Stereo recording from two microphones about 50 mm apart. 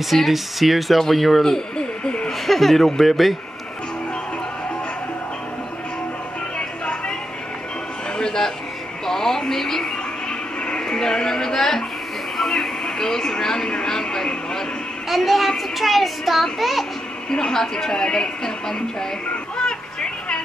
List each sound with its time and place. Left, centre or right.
0.1 s speech: centre
2.4 s speech: centre
8.2 s a sound: centre
9.0 s speech: centre
12.4 s music: centre
15.0 s speech: centre
17.3 s speech: centre
19.5 s vehicle: centre